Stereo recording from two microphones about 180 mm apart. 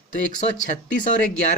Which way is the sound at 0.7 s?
45° left (ahead or behind).